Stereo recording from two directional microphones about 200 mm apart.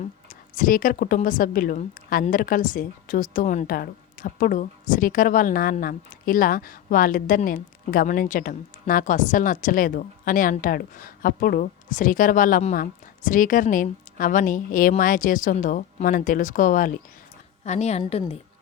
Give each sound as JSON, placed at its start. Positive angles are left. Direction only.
{"t": 0.5, "sound": "a woman's voice", "side_deg": 45}